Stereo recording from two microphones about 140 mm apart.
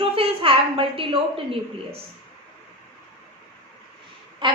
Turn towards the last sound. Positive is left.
turn(degrees=-35)  # may be behind; listen again after turning